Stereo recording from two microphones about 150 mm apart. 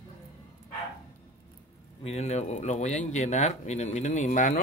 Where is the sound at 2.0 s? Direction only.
45° left (ahead or behind).